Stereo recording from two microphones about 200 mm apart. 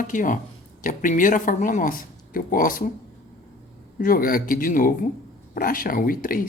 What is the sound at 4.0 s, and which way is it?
Speech, 45° left (ahead or behind).